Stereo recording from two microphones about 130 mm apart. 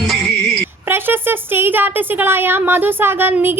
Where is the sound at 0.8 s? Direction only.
15° right (ahead or behind).